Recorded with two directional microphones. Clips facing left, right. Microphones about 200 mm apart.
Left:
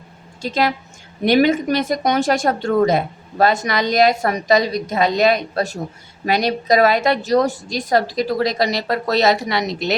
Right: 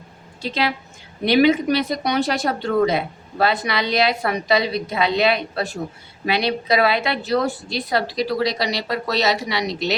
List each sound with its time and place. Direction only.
0.4 s speech: 45° left (ahead or behind)